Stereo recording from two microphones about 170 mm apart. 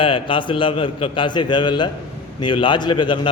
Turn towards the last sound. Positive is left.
turn(degrees=30)  # may be behind; listen again after turning